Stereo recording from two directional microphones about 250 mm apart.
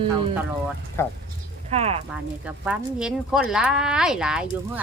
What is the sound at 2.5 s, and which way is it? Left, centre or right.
Speech, centre.